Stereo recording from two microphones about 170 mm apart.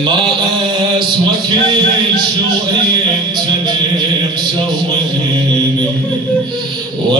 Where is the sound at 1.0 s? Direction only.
25° right (ahead or behind).